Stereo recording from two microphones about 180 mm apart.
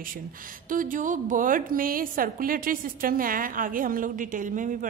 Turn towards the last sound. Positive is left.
turn(degrees=-45)  # may be behind; listen again after turning